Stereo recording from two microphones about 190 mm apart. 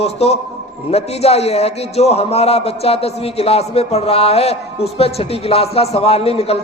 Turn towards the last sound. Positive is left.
turn(degrees=30)  # may be behind; listen again after turning